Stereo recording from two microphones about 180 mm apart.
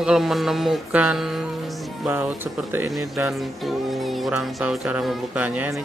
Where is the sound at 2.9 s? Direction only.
Centre (ahead or behind).